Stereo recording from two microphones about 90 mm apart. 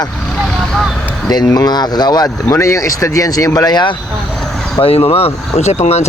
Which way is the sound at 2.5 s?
35° left (ahead or behind).